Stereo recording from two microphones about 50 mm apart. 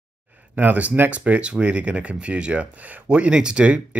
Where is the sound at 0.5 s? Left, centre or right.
Right.